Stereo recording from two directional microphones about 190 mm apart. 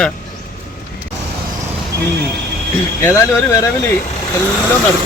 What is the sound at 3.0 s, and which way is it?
Speech, 15° left (ahead or behind).